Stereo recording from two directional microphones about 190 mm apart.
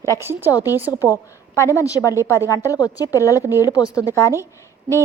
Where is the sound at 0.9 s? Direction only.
15° left (ahead or behind).